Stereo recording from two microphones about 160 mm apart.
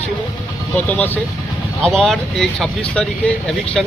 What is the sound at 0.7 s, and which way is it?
Speech, 10° left (ahead or behind).